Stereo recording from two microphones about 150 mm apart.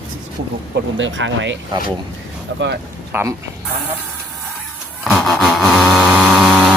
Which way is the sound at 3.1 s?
15° right (ahead or behind).